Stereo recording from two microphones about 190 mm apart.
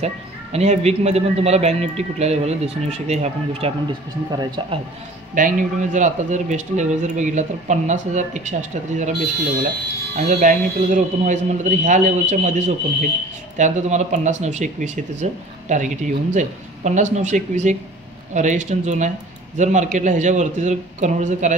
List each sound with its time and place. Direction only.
0.0 s speech: 35° right (ahead or behind)
4.4 s speech: 20° right (ahead or behind)
5.3 s speech: 45° right (ahead or behind)
10.1 s speech: 40° right (ahead or behind)